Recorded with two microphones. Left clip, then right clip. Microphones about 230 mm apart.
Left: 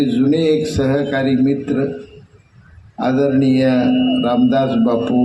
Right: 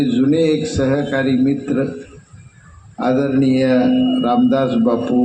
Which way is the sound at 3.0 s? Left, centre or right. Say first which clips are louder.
Left 1 dB; left.